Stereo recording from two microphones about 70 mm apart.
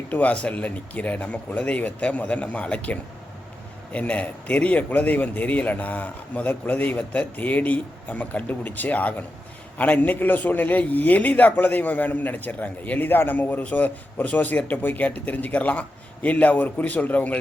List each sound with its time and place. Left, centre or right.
0.1 s a man's voice: left